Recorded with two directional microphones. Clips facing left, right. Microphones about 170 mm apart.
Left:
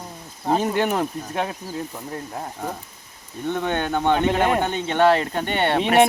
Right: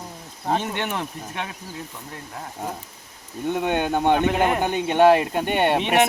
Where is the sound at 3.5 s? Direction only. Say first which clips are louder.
Right 1 dB; 10° right (ahead or behind).